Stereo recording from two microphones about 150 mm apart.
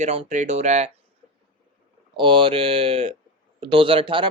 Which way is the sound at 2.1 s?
35° right (ahead or behind).